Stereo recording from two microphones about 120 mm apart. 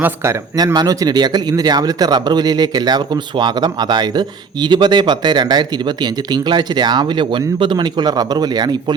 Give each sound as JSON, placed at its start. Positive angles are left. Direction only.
{"t": 0.5, "sound": "speech", "side_deg": -35}